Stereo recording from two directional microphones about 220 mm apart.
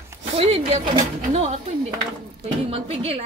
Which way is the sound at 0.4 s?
30° right (ahead or behind).